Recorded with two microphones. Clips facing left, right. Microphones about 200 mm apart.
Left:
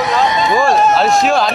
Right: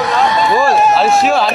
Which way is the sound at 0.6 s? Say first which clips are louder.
Even; 5° right (ahead or behind).